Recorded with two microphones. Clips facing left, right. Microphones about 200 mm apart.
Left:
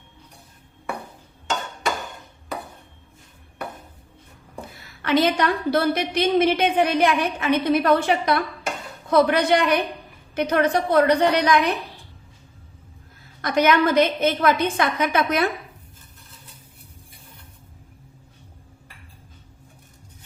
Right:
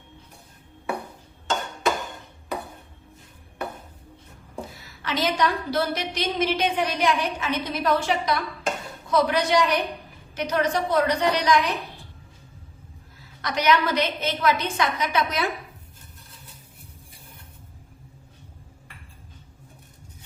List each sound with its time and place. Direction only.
5.0 s a woman's voice: 60° left (ahead or behind)
13.4 s a woman's voice: 50° left (ahead or behind)